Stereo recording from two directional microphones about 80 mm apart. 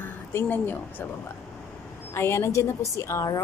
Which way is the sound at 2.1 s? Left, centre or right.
Left.